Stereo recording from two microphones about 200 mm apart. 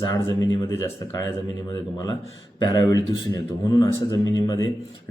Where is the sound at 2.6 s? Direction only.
20° left (ahead or behind).